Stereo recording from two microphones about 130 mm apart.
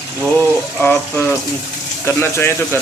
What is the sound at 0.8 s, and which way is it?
Speech, 15° left (ahead or behind).